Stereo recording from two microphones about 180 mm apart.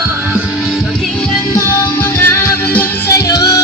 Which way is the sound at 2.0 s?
10° left (ahead or behind).